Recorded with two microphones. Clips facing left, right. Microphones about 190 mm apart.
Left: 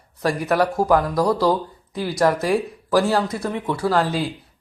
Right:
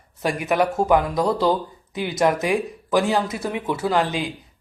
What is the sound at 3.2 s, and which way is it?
Speech, 5° right (ahead or behind).